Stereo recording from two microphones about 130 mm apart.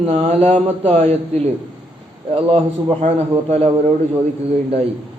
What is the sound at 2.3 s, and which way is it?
Speech, 45° right (ahead or behind).